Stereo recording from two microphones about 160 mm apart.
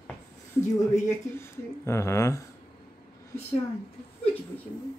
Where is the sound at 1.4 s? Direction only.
15° left (ahead or behind).